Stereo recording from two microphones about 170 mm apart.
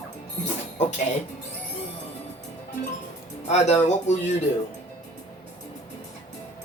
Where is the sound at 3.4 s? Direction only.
40° left (ahead or behind).